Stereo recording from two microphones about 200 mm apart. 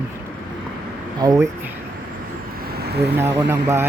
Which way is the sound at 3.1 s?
10° right (ahead or behind).